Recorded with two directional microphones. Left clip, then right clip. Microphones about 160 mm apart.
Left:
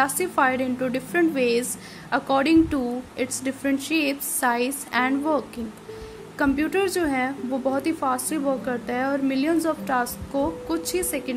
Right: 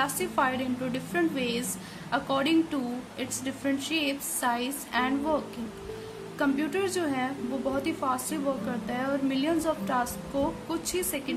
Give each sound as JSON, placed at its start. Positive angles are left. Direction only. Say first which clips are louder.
{"t": 0.0, "sound": "a woman's voice", "louder": "left 6 dB", "side_deg": 40}